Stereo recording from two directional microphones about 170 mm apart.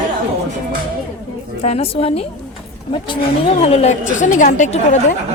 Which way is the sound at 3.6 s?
40° left (ahead or behind).